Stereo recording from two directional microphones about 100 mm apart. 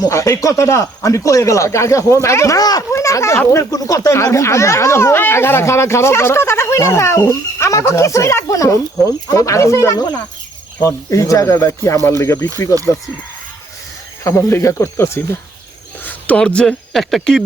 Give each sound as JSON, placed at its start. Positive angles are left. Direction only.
{"t": 0.0, "sound": "speech", "side_deg": 30}
{"t": 2.9, "sound": "speech", "side_deg": 30}
{"t": 14.3, "sound": "speech", "side_deg": 25}
{"t": 16.0, "sound": "cricket", "side_deg": 15}
{"t": 16.6, "sound": "speech", "side_deg": 5}